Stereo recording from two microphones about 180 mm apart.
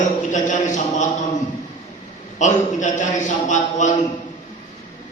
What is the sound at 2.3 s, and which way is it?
A man's voice, 40° left (ahead or behind).